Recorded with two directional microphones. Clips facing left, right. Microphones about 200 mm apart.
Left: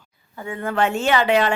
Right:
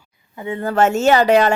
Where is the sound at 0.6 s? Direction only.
40° right (ahead or behind).